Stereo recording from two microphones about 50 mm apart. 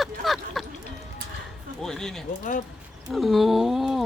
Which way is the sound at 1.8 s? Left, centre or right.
Centre.